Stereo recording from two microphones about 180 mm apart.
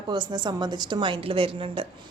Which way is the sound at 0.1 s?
25° right (ahead or behind).